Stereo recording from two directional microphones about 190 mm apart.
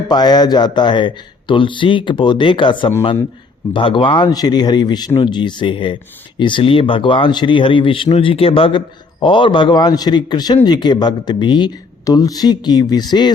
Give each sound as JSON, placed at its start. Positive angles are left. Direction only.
{"t": 0.1, "sound": "a man's voice", "side_deg": 20}